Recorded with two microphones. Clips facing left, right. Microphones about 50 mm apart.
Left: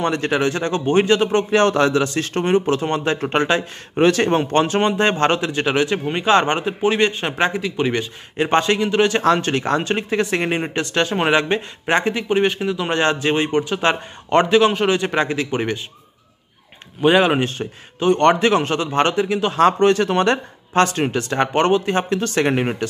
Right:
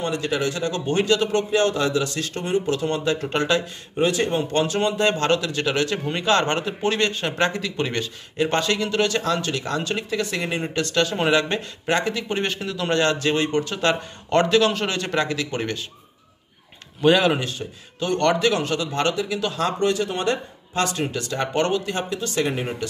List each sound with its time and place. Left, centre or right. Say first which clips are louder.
0.0 s speech: left 5 dB; left
1.5 s speech: left 6 dB; left
2.0 s speech: left 7 dB; left
3.9 s speech: left 6 dB; left; by 8.1 s centre
8.4 s speech: left 4 dB; left
9.2 s speech: left 7 dB; left
12.3 s speech: left 7 dB; centre
17.0 s speech: left 3 dB; left